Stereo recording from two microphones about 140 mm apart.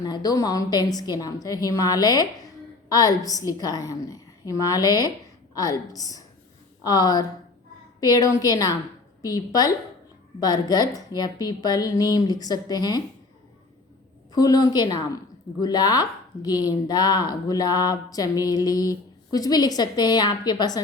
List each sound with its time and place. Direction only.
0.0 s speech: 30° left (ahead or behind)
14.3 s speech: 25° left (ahead or behind)